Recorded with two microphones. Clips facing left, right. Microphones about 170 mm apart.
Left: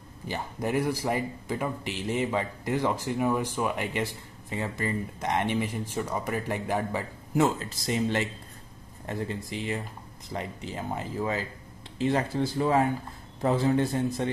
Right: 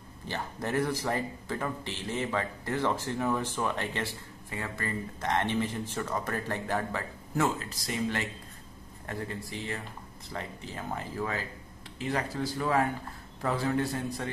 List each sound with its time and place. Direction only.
0.3 s speech: 10° left (ahead or behind)